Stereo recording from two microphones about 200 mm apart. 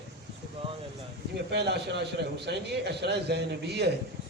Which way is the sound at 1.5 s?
55° right (ahead or behind).